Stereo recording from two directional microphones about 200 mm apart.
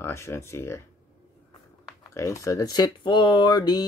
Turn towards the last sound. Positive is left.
turn(degrees=20)  # may be behind; listen again after turning